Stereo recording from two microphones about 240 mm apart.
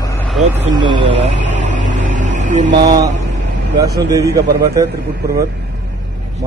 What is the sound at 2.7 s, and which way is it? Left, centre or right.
Speech, centre.